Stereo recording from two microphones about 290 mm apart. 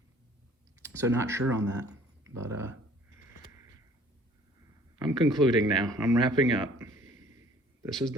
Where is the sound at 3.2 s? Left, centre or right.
Left.